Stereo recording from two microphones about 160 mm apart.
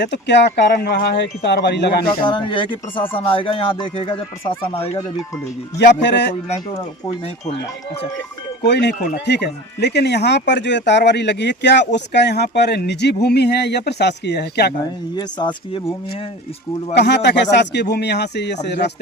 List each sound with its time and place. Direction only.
0.0 s speech: 90° left
2.2 s speech: 30° left (ahead or behind)
5.7 s speech: 90° left
8.6 s speech: 90° left
15.1 s speech: 25° left (ahead or behind)
16.9 s speech: 90° left